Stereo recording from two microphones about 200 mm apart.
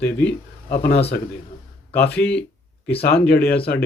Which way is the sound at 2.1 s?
5° left (ahead or behind).